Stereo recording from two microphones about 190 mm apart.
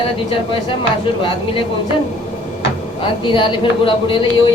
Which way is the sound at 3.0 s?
25° left (ahead or behind).